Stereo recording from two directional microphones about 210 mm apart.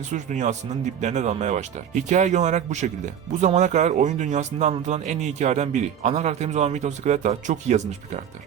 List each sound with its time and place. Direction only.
0.1 s speech: 35° right (ahead or behind)